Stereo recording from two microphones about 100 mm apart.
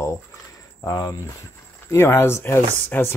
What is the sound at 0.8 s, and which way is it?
Speech, 40° left (ahead or behind).